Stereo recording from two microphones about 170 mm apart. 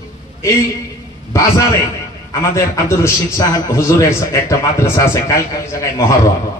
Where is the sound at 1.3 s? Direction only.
20° left (ahead or behind).